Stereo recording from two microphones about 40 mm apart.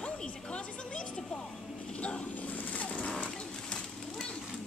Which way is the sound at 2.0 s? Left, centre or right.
Left.